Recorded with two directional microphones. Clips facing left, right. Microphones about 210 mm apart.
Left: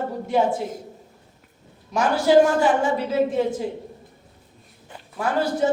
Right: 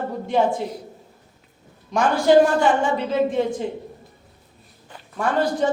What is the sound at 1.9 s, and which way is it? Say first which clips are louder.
A woman's voice: right 1 dB; 5° left (ahead or behind).